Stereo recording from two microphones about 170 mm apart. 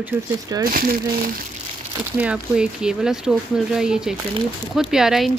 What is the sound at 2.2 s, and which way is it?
Speech, 5° right (ahead or behind).